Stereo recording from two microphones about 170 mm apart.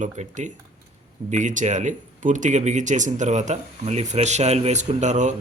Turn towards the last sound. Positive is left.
turn(degrees=-45)  # may be behind; listen again after turning